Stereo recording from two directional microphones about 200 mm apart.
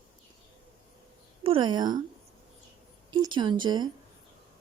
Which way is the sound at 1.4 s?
25° right (ahead or behind).